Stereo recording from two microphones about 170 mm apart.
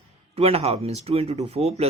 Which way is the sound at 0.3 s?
35° right (ahead or behind).